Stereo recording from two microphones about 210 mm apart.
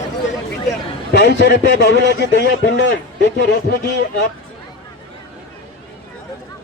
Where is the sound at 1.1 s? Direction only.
50° left (ahead or behind).